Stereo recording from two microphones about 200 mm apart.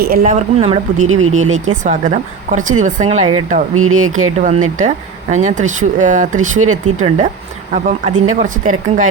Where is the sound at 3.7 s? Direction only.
90° right.